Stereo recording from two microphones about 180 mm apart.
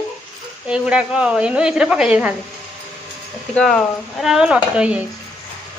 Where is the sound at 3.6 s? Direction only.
5° left (ahead or behind).